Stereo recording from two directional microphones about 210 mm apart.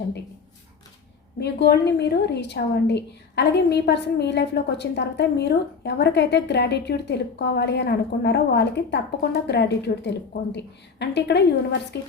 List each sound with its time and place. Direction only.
1.4 s a woman's voice: 50° left (ahead or behind)